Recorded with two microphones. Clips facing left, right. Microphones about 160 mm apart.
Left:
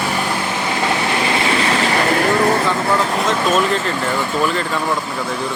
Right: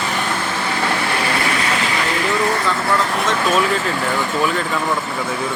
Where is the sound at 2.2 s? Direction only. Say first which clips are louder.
Left 2 dB; 45° left (ahead or behind).